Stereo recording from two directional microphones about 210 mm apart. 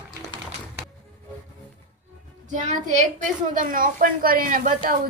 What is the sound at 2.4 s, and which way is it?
Speech, 35° right (ahead or behind).